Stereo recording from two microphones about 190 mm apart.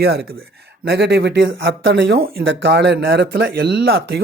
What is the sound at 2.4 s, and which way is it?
Speech, 75° right (ahead or behind).